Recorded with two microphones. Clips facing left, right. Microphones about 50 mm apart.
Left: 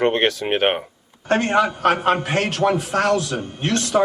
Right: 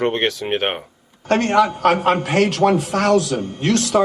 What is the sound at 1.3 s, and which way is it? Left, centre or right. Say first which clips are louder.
A man's voice: right 2 dB; left.